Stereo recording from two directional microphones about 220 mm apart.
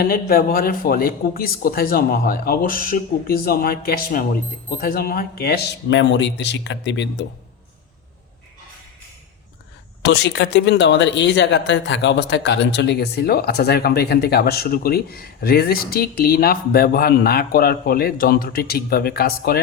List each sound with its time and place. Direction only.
0.0 s speech: 45° left (ahead or behind)
10.0 s speech: 50° left (ahead or behind)